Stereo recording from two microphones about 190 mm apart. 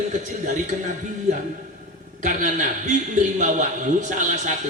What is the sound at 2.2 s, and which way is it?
A man's voice, 40° right (ahead or behind).